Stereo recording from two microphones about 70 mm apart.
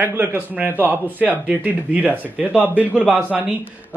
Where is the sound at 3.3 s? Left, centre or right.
Centre.